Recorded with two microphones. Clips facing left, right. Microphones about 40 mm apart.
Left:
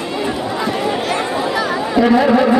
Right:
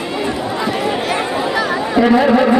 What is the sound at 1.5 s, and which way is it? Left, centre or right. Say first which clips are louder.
Chatter: right 1 dB; centre.